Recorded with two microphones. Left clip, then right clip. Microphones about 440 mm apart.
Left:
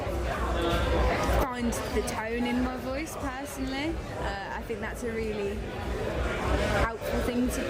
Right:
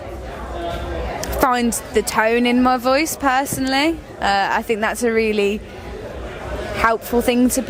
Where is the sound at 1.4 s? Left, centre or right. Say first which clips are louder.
Right 13 dB; right.